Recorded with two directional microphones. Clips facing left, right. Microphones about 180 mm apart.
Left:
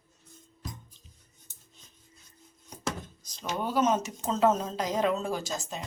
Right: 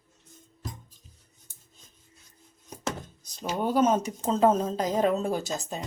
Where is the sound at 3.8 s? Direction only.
35° right (ahead or behind).